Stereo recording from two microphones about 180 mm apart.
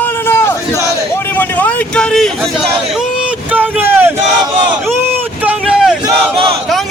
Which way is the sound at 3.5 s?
10° right (ahead or behind).